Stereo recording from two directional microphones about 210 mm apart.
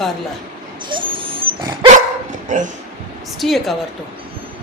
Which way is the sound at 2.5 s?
35° right (ahead or behind).